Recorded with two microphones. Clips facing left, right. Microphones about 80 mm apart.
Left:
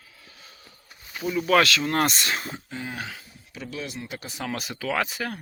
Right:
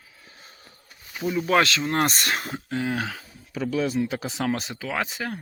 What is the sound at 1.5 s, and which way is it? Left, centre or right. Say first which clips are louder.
Speech: left 1 dB; right.